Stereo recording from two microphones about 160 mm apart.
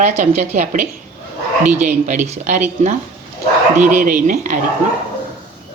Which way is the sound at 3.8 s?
55° right (ahead or behind).